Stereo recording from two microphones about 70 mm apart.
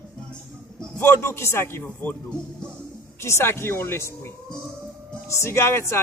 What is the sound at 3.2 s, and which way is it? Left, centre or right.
Speech, left.